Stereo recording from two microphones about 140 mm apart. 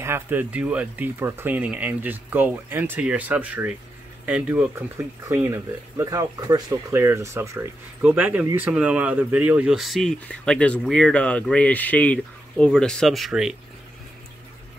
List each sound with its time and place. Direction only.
0.0 s speech: 15° right (ahead or behind)